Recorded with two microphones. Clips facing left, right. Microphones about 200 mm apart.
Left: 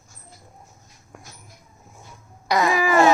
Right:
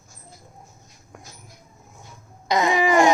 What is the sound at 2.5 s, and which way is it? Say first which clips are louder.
Speech: right 1 dB; 20° right (ahead or behind).